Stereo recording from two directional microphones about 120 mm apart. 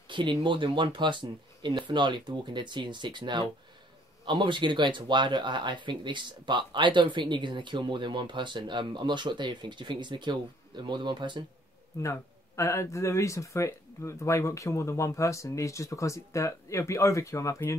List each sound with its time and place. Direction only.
0.1 s speech: 40° right (ahead or behind)
12.0 s speech: 25° left (ahead or behind)